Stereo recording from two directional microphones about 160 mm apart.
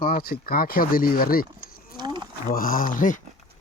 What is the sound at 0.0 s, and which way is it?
Speech, 65° left (ahead or behind).